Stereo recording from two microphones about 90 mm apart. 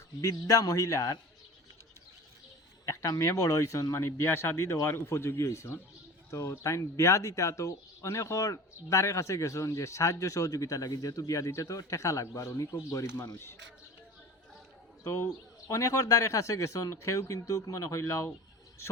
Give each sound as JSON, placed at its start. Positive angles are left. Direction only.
{"t": 0.2, "sound": "speech", "side_deg": 40}
{"t": 2.8, "sound": "speech", "side_deg": 35}
{"t": 15.0, "sound": "speech", "side_deg": 35}